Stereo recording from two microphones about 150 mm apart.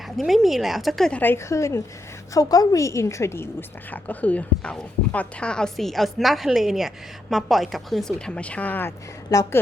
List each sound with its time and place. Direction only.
0.2 s a woman's voice: centre (ahead or behind)
9.3 s a woman's voice: 25° left (ahead or behind)